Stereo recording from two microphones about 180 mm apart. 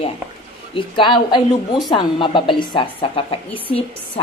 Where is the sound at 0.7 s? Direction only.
30° left (ahead or behind).